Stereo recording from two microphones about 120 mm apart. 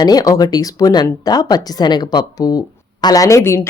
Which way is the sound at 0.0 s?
30° left (ahead or behind).